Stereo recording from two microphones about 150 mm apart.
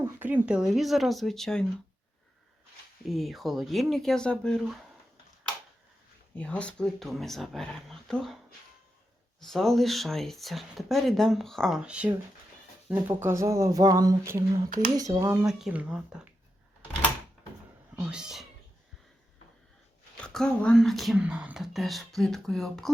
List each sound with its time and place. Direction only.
0.0 s speech: 15° right (ahead or behind); by 1.6 s 5° left (ahead or behind)
3.1 s speech: centre (ahead or behind)
6.3 s speech: 10° left (ahead or behind)
9.4 s speech: centre (ahead or behind); by 15.4 s 20° right (ahead or behind)
15.4 s speech: 5° right (ahead or behind)
17.9 s speech: 5° right (ahead or behind)
20.1 s speech: 5° left (ahead or behind)